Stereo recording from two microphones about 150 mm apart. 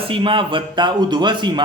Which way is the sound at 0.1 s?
35° right (ahead or behind).